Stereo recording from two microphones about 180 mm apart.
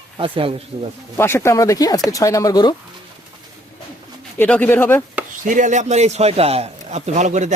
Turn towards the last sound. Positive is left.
turn(degrees=-40)  # may be behind; listen again after turning